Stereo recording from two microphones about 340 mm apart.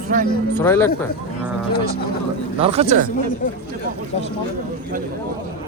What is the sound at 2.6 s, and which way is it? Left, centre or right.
Speech, centre.